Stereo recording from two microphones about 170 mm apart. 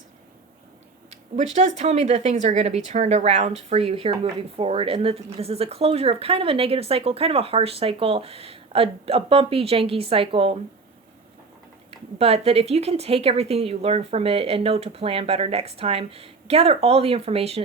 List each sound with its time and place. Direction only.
1.5 s a woman's voice: 40° right (ahead or behind)
11.9 s a woman's voice: 35° right (ahead or behind)